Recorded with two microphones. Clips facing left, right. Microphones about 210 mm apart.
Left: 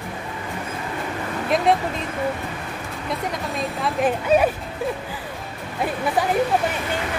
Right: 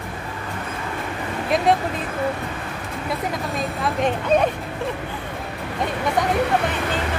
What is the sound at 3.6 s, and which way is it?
Speech, centre (ahead or behind).